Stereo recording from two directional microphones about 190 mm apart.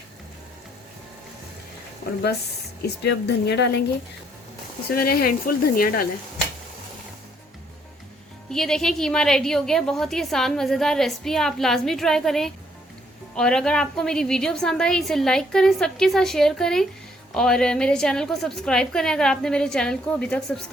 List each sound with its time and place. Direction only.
2.8 s speech: 60° left (ahead or behind)
4.9 s speech: 55° left (ahead or behind)
8.4 s a woman's voice: centre (ahead or behind)